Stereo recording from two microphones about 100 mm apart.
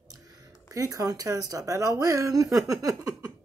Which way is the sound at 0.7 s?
35° right (ahead or behind).